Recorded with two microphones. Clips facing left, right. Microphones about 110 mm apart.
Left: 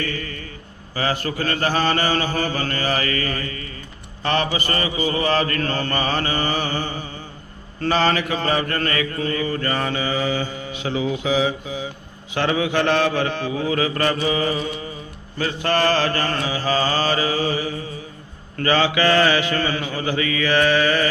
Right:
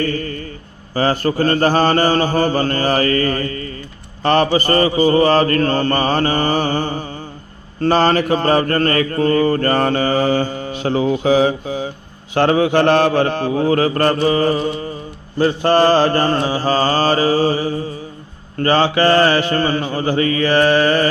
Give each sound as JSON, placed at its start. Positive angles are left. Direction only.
{"t": 0.0, "sound": "mantra", "side_deg": -40}
{"t": 4.2, "sound": "a man's voice", "side_deg": -40}
{"t": 4.5, "sound": "mantra", "side_deg": -40}
{"t": 15.4, "sound": "mantra", "side_deg": -35}